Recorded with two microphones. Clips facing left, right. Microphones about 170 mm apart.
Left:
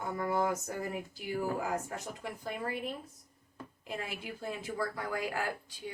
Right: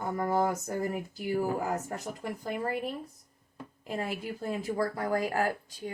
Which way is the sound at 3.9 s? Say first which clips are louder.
Right 6 dB; 40° right (ahead or behind).